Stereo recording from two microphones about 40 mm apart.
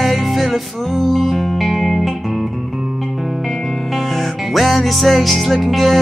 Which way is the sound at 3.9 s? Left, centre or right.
Centre.